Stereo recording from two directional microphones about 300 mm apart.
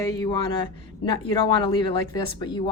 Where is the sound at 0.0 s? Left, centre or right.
Centre.